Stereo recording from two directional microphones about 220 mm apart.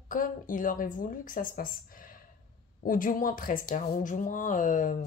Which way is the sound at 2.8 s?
40° left (ahead or behind).